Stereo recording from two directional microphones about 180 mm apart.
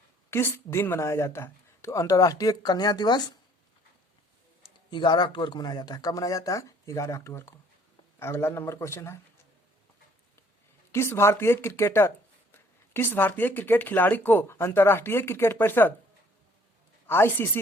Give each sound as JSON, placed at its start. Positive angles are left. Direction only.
{"t": 0.3, "sound": "speech", "side_deg": 15}
{"t": 4.9, "sound": "speech", "side_deg": 25}
{"t": 10.9, "sound": "speech", "side_deg": 15}
{"t": 17.1, "sound": "speech", "side_deg": 10}